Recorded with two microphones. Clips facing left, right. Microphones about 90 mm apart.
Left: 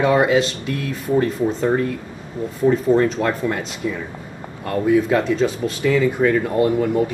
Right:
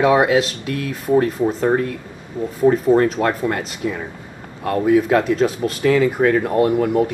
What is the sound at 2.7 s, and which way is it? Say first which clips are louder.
Speech: right 1 dB; 25° right (ahead or behind).